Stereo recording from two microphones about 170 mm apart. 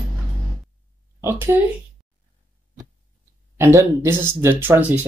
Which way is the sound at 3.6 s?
15° right (ahead or behind).